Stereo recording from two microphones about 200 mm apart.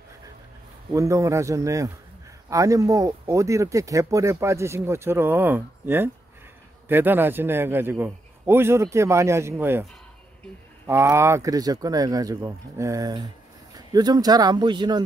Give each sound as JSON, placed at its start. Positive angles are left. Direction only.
{"t": 0.9, "sound": "speech", "side_deg": -15}
{"t": 10.9, "sound": "speech", "side_deg": -15}